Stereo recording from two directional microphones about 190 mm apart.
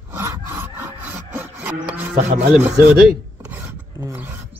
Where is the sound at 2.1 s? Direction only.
45° right (ahead or behind).